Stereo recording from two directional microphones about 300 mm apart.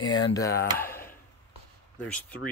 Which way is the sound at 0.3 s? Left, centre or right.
Centre.